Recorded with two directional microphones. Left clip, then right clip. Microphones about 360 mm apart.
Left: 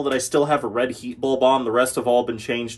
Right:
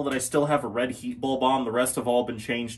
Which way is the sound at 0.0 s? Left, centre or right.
Centre.